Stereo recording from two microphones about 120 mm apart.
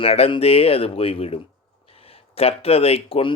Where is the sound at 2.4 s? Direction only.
55° left (ahead or behind).